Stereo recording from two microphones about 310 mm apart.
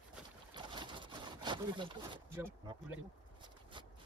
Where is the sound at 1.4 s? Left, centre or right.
Centre.